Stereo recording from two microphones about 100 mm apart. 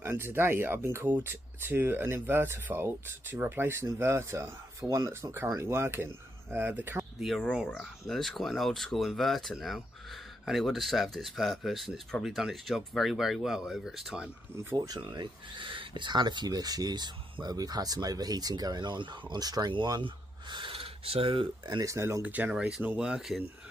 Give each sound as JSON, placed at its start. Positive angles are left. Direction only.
{"t": 0.0, "sound": "speech", "side_deg": -25}
{"t": 7.2, "sound": "speech", "side_deg": 0}
{"t": 15.0, "sound": "speech", "side_deg": -50}
{"t": 19.7, "sound": "speech", "side_deg": -50}
{"t": 21.6, "sound": "speech", "side_deg": -40}
{"t": 21.9, "sound": "speech", "side_deg": -30}
{"t": 22.2, "sound": "speech", "side_deg": -15}